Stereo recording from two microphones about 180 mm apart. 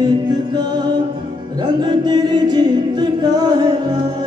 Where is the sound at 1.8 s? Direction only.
25° right (ahead or behind).